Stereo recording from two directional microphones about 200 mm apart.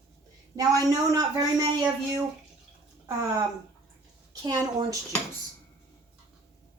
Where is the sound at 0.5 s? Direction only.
20° right (ahead or behind).